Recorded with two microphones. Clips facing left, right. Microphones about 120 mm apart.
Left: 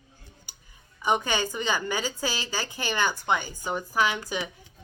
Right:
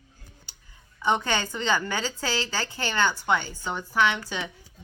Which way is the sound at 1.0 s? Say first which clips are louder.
Even; 15° left (ahead or behind).